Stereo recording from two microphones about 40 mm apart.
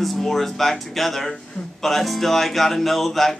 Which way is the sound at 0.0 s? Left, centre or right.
Centre.